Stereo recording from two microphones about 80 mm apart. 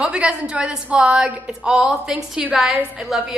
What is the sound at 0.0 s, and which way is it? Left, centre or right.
A woman's voice, centre.